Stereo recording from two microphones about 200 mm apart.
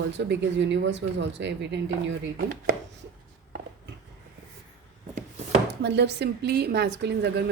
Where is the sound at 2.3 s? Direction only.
50° right (ahead or behind).